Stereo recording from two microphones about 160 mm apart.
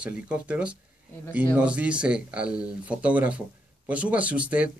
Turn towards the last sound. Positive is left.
turn(degrees=-10)  # may be behind; listen again after turning